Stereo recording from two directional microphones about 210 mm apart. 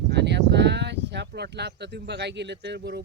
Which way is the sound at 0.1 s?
55° right (ahead or behind).